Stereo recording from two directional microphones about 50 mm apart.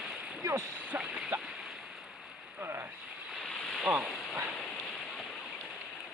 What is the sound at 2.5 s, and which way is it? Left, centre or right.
Boat, right.